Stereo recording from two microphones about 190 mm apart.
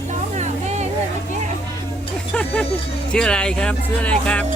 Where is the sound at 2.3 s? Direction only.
5° left (ahead or behind).